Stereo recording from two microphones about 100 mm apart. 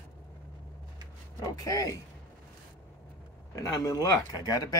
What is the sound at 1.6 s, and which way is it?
Speech, 35° left (ahead or behind).